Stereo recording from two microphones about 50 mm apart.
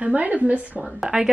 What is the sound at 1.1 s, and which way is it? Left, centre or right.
Speech, centre.